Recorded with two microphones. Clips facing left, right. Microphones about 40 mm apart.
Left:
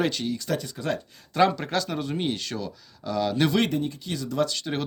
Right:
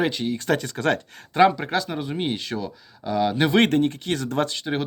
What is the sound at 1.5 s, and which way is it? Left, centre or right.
Speech, centre.